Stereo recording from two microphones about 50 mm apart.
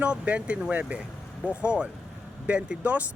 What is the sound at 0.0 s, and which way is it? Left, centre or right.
Speech, right.